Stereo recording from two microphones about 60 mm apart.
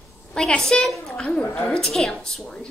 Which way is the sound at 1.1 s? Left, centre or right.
Centre.